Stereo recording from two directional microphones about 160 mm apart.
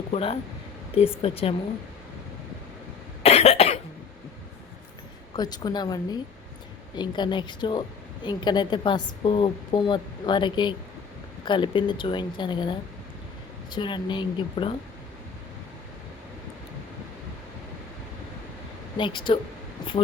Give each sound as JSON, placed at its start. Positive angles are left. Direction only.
{"t": 0.1, "sound": "speech", "side_deg": 40}
{"t": 3.2, "sound": "cough", "side_deg": 40}
{"t": 5.4, "sound": "a woman's voice", "side_deg": 25}
{"t": 18.9, "sound": "a woman's voice", "side_deg": 30}